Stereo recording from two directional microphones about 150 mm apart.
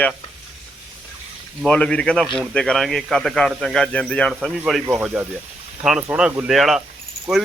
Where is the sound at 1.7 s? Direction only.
5° left (ahead or behind).